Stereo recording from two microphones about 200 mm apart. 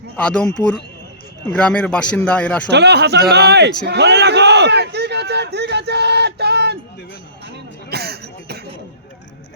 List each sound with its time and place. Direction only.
0.2 s a man's voice: 5° left (ahead or behind)
1.5 s speech: 5° left (ahead or behind)
2.6 s a sound: 60° right (ahead or behind)